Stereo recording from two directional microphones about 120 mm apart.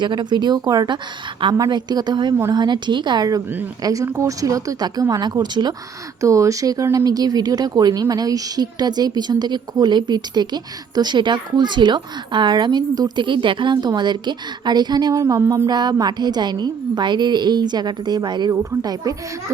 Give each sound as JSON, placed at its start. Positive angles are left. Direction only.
{"t": 0.0, "sound": "speech", "side_deg": -40}
{"t": 6.2, "sound": "speech", "side_deg": -25}
{"t": 18.5, "sound": "speech", "side_deg": -25}
{"t": 19.5, "sound": "a sound", "side_deg": -20}